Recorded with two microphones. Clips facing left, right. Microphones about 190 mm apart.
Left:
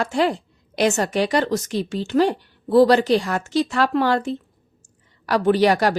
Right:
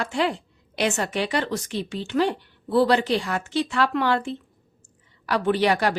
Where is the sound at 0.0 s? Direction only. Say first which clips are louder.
Left 4 dB; 40° left (ahead or behind).